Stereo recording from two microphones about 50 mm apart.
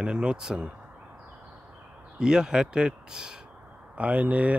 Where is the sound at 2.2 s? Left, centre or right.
Centre.